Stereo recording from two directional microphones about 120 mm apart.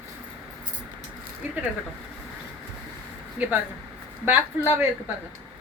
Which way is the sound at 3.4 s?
10° right (ahead or behind).